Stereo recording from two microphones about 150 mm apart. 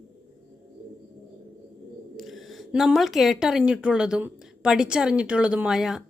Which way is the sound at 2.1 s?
Centre (ahead or behind).